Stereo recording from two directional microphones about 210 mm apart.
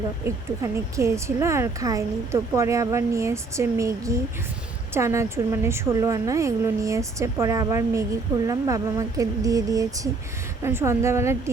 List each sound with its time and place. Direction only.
0.3 s speech: 15° right (ahead or behind)